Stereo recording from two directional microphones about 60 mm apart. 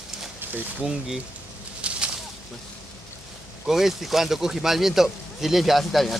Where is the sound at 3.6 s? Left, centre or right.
Centre.